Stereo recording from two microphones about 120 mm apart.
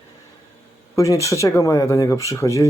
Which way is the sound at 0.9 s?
25° left (ahead or behind).